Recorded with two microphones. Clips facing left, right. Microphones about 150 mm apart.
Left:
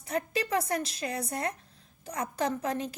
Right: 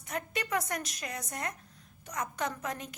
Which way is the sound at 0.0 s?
30° left (ahead or behind).